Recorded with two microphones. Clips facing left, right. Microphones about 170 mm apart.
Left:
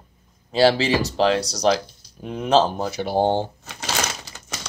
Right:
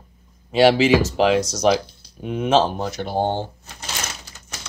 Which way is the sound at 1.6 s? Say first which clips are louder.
Left 1 dB; 10° right (ahead or behind).